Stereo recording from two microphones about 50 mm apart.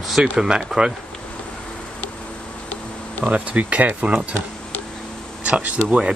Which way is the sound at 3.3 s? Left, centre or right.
Right.